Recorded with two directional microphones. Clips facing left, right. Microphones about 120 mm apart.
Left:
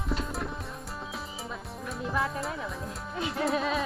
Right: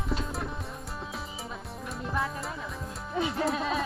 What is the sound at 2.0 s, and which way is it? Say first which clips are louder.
Music: left 2 dB; centre (ahead or behind).